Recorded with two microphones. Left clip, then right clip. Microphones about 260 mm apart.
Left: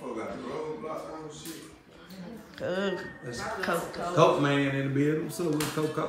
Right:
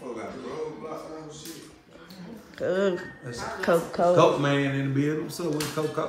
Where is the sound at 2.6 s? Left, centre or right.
Centre.